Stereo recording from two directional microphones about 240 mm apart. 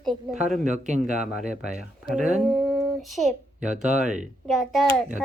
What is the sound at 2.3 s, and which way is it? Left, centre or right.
A child's voice, centre.